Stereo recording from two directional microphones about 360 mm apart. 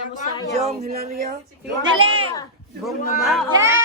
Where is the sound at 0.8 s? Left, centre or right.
Right.